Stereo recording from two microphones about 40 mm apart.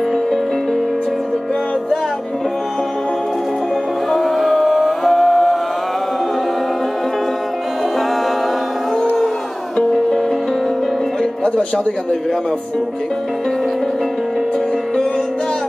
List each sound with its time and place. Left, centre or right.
4.1 s music: centre
11.4 s speech: centre